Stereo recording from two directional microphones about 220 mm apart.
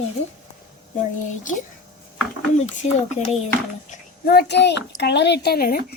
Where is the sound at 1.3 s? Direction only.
35° left (ahead or behind).